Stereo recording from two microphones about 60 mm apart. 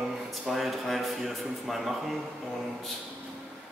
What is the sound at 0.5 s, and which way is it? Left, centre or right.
Speech, centre.